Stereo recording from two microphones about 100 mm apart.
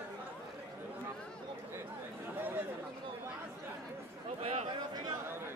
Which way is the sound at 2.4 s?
20° right (ahead or behind).